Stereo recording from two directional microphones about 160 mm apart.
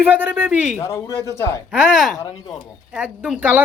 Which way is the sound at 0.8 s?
15° left (ahead or behind).